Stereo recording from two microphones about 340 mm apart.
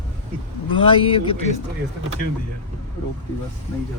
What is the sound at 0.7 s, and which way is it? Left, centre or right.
Speech, centre.